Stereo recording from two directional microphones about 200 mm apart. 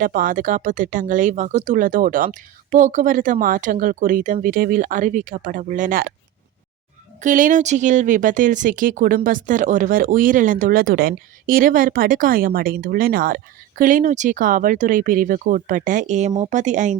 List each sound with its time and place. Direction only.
0.0 s speech: 45° right (ahead or behind)
7.2 s speech: 40° right (ahead or behind)